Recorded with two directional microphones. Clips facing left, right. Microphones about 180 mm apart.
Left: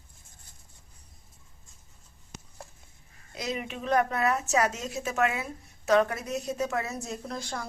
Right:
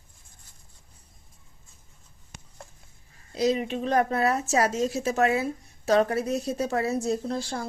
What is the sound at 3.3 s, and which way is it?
Speech, 35° right (ahead or behind).